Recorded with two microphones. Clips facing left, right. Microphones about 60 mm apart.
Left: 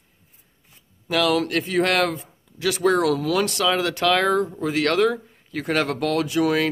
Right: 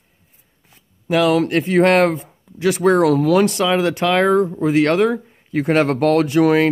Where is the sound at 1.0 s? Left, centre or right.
Right.